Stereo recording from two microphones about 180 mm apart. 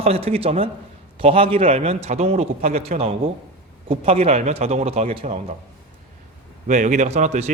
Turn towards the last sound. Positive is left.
turn(degrees=-40)  # may be behind; listen again after turning